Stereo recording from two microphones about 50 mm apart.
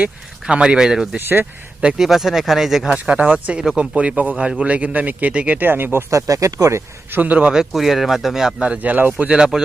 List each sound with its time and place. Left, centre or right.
0.0 s speech: centre
1.2 s speech: right
1.8 s speech: centre
2.0 s speech: centre
2.9 s speech: right
5.5 s speech: right
6.1 s speech: right
7.1 s speech: right
7.5 s speech: centre
8.6 s speech: right
9.1 s speech: right